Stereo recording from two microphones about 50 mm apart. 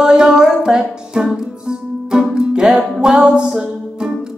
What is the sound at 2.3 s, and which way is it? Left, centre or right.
Music, centre.